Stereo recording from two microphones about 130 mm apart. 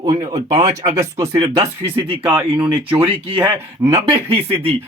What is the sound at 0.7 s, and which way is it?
Speech, 25° right (ahead or behind).